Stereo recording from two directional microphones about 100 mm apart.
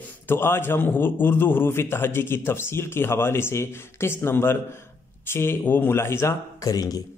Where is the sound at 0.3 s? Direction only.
20° left (ahead or behind).